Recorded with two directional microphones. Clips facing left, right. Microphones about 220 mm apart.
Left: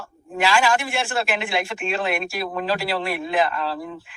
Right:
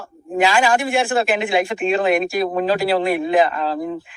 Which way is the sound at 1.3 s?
35° right (ahead or behind).